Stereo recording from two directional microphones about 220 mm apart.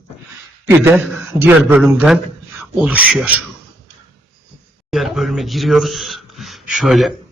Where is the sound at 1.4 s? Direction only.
10° right (ahead or behind).